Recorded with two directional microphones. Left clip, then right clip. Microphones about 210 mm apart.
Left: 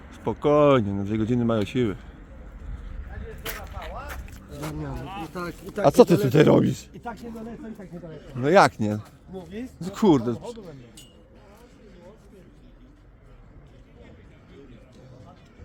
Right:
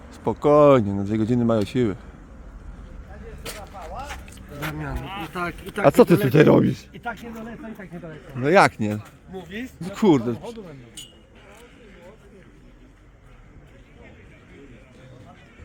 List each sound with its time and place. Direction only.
0.1 s speech: 10° right (ahead or behind)
3.4 s a sound: centre (ahead or behind)
5.0 s speech: 15° left (ahead or behind)
5.3 s speech: 5° right (ahead or behind)
6.1 s speech: 10° right (ahead or behind)
6.6 s speech: 5° left (ahead or behind)
6.9 s speech: 10° right (ahead or behind)
9.3 s speech: 15° right (ahead or behind)
9.8 s speech: centre (ahead or behind)